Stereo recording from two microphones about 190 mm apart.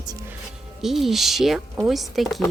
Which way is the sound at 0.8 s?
Centre (ahead or behind).